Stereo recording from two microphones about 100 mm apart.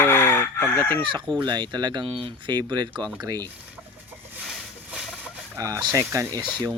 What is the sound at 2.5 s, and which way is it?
Speech, 45° right (ahead or behind).